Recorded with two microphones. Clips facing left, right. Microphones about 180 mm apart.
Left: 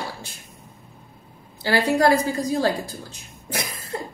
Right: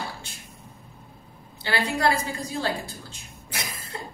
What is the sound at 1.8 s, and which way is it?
Speech, 40° left (ahead or behind).